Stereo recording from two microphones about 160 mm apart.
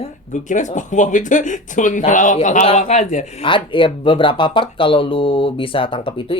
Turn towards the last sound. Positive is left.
turn(degrees=30)  # may be behind; listen again after turning